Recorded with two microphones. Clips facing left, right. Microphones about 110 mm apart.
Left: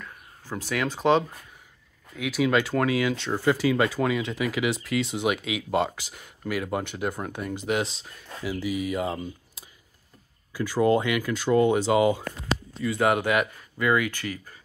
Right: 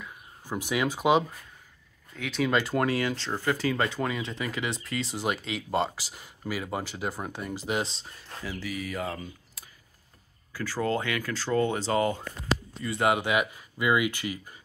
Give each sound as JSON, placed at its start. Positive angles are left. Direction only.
{"t": 0.0, "sound": "a sound", "side_deg": -15}
{"t": 2.1, "sound": "speech", "side_deg": 5}
{"t": 3.3, "sound": "speech", "side_deg": 15}
{"t": 8.5, "sound": "speech", "side_deg": 20}
{"t": 12.8, "sound": "speech", "side_deg": 0}
{"t": 13.1, "sound": "speech", "side_deg": -10}